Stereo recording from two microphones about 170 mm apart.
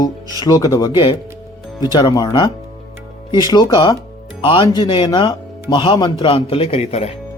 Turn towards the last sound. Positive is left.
turn(degrees=40)  # may be behind; listen again after turning